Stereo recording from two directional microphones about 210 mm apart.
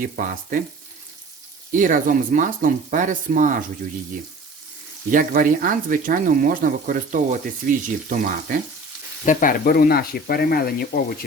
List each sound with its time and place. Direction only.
0.0 s frying: 40° right (ahead or behind)
1.7 s speech: 40° right (ahead or behind)
5.1 s speech: 40° right (ahead or behind)
7.6 s frying: 45° right (ahead or behind)
8.1 s speech: 40° right (ahead or behind)
9.2 s speech: 40° left (ahead or behind)